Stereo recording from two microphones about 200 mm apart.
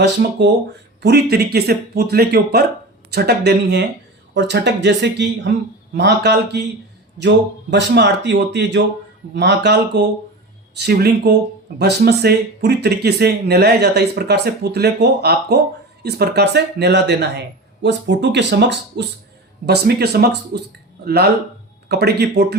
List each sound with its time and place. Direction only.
0.0 s speech: 60° right (ahead or behind)